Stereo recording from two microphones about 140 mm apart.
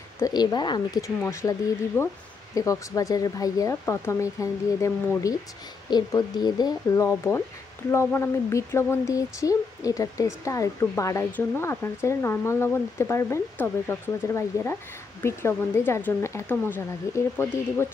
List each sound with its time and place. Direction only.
0.2 s speech: 30° left (ahead or behind)
7.1 s speech: 15° left (ahead or behind)